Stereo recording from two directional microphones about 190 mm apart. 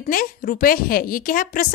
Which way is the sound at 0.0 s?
50° left (ahead or behind).